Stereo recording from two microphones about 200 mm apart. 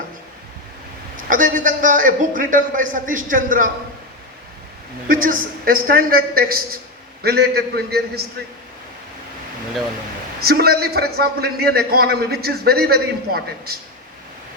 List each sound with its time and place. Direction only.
1.1 s a man's voice: 40° right (ahead or behind)
5.0 s a man's voice: 45° right (ahead or behind)
10.4 s a man's voice: 50° right (ahead or behind)